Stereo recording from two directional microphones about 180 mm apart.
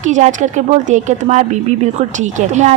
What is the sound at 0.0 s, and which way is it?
A woman's voice, 40° right (ahead or behind).